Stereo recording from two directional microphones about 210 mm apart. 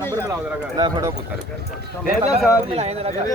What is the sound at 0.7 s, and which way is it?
Speech, 20° right (ahead or behind).